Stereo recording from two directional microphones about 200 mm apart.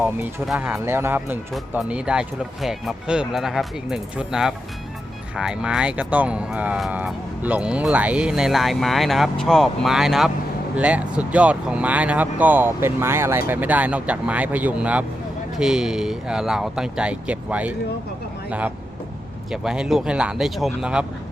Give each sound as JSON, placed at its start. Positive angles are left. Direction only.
{"t": 0.0, "sound": "speech", "side_deg": -10}
{"t": 19.5, "sound": "speech", "side_deg": -5}